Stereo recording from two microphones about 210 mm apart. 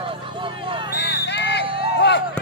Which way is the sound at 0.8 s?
55° left (ahead or behind).